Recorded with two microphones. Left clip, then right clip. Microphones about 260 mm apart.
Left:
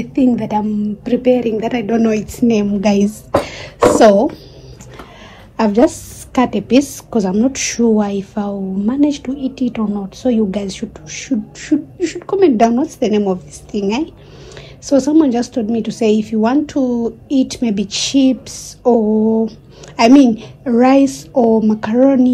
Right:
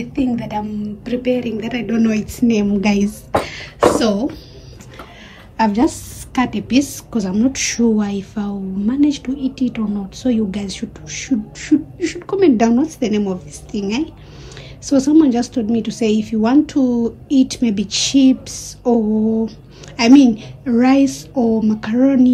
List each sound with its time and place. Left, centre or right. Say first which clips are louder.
0.0 s a woman's voice: left 5 dB; centre
5.6 s a woman's voice: left 3 dB; centre